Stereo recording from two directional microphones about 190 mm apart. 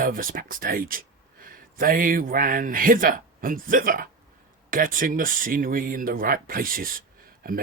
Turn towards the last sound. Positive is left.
turn(degrees=-50)  # may be behind; listen again after turning